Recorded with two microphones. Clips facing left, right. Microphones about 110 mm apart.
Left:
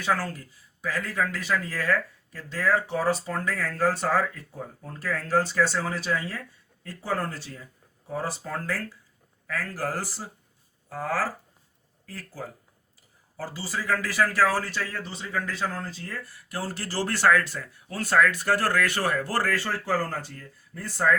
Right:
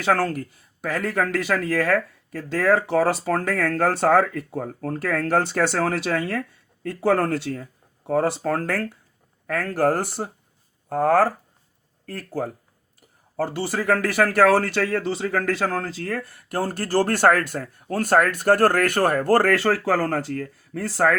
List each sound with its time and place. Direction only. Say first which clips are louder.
0.0 s speech: right 6 dB; 75° right (ahead or behind); by 19.5 s 50° right (ahead or behind)
19.5 s speech: right 7 dB; 80° right